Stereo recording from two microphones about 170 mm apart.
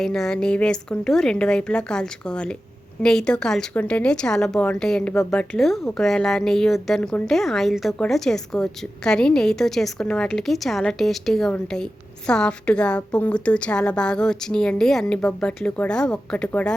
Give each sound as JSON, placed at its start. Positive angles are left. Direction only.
{"t": 0.0, "sound": "a woman's voice", "side_deg": 5}